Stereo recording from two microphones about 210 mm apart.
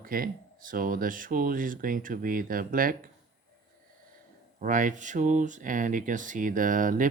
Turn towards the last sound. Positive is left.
turn(degrees=-40)  # may be behind; listen again after turning